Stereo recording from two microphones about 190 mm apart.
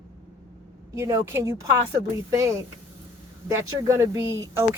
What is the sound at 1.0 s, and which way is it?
Speech, 15° right (ahead or behind).